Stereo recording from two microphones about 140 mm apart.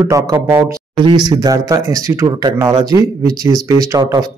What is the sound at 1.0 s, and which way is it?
Speech, 30° right (ahead or behind).